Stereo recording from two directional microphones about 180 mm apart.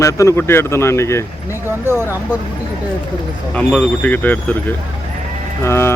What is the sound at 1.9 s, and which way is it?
Speech, 15° right (ahead or behind).